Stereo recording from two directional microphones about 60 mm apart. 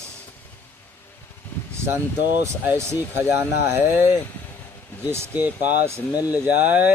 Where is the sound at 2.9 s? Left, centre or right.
Right.